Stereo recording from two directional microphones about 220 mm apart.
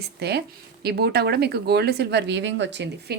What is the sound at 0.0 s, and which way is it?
A woman's voice, 50° right (ahead or behind).